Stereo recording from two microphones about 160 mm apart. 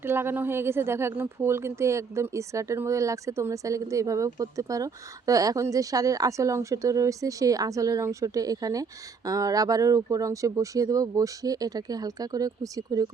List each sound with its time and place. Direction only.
0.0 s a woman's voice: 15° right (ahead or behind)